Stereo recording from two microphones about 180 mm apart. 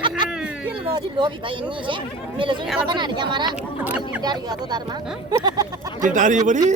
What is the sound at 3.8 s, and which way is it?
Speech, 5° right (ahead or behind).